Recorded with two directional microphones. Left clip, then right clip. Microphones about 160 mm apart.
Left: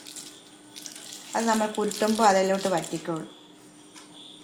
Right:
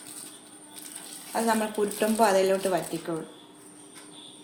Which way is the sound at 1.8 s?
35° left (ahead or behind).